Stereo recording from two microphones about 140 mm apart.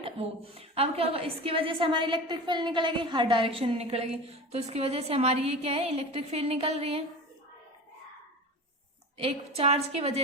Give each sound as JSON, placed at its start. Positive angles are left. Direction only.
{"t": 0.0, "sound": "a woman's voice", "side_deg": -45}
{"t": 9.1, "sound": "a woman's voice", "side_deg": -45}